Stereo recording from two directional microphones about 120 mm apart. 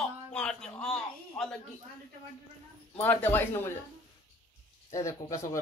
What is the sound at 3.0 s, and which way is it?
Speech, 15° left (ahead or behind).